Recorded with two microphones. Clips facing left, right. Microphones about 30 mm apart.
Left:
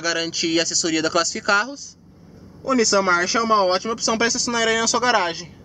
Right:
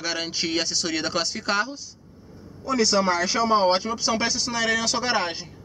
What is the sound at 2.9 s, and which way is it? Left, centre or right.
Speech, left.